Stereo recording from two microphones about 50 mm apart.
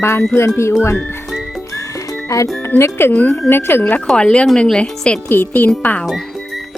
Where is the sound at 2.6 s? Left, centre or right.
Left.